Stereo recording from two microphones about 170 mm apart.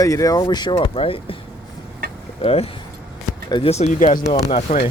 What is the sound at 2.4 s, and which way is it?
Speech, 35° left (ahead or behind).